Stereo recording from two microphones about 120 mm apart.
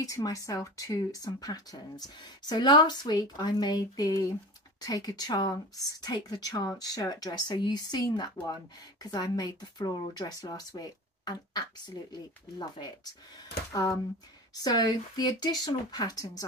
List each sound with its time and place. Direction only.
0.0 s speech: 30° left (ahead or behind)